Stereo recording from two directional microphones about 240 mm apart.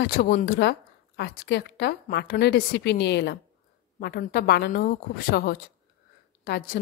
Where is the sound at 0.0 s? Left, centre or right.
Left.